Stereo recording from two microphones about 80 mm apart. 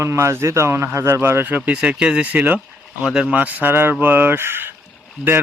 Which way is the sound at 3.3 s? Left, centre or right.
Centre.